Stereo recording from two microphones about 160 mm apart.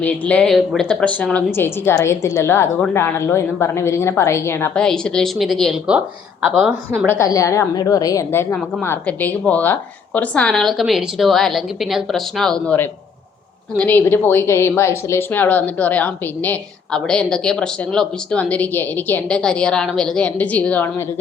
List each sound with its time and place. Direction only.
0.0 s a woman's voice: 5° left (ahead or behind)
7.0 s a woman's voice: 15° left (ahead or behind)